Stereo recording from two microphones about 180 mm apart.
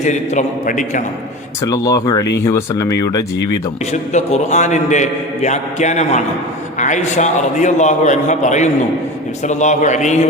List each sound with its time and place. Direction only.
0.0 s a man's voice: 40° left (ahead or behind)
1.6 s speech: 20° left (ahead or behind)
3.9 s a man's voice: 40° left (ahead or behind)